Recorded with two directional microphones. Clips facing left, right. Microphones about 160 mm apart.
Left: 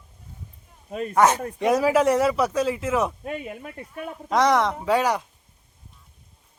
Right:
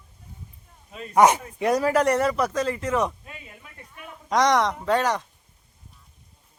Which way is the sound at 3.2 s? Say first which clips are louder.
Left 13 dB; 65° left (ahead or behind).